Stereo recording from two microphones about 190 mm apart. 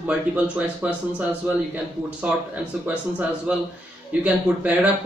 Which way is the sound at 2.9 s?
10° right (ahead or behind).